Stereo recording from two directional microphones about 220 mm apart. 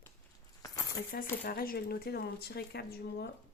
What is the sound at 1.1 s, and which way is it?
Speech, 40° left (ahead or behind).